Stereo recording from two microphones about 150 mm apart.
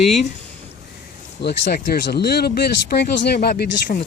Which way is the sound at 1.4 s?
90° left.